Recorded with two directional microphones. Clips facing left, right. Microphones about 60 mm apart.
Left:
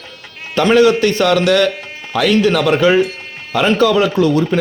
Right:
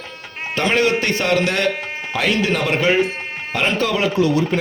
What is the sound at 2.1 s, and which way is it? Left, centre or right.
Speech, left.